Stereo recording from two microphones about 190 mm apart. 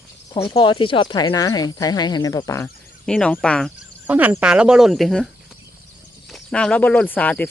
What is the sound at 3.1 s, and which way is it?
Speech, 5° left (ahead or behind).